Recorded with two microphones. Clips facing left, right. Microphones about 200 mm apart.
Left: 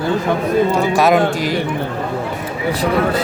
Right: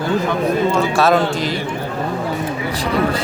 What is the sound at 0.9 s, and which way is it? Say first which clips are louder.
Speech: left 3 dB; 15° left (ahead or behind).